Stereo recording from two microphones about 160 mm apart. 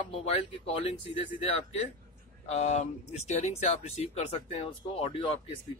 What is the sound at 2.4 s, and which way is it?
Speech, 45° left (ahead or behind).